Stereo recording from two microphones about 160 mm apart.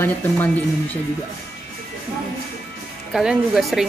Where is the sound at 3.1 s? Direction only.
5° right (ahead or behind).